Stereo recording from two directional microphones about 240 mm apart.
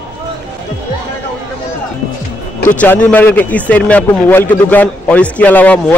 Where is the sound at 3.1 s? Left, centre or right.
Centre.